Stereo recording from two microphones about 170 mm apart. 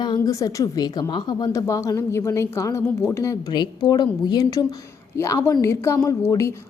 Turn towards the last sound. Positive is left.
turn(degrees=15)  # may be behind; listen again after turning